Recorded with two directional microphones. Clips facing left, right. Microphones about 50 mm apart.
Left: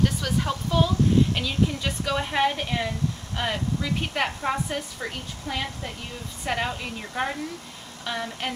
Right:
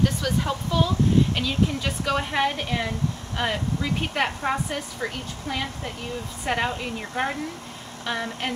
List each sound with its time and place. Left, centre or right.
0.0 s a woman's voice: centre